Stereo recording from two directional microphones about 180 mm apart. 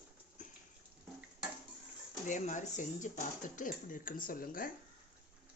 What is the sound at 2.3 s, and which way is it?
Speech, 45° left (ahead or behind).